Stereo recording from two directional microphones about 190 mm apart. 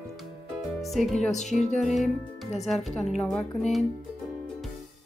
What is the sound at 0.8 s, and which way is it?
Speech, centre (ahead or behind).